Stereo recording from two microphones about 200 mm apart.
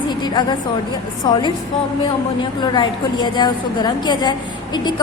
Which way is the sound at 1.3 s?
20° left (ahead or behind).